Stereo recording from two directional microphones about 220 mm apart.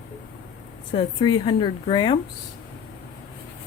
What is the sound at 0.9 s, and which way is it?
Speech, 25° left (ahead or behind).